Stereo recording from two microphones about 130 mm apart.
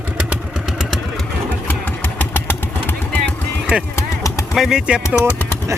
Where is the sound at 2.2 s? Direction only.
15° left (ahead or behind).